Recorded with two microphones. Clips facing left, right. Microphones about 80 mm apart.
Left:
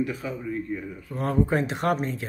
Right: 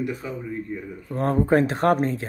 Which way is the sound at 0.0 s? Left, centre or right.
Centre.